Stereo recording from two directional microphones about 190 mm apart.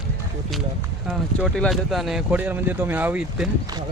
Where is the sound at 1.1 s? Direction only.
Centre (ahead or behind).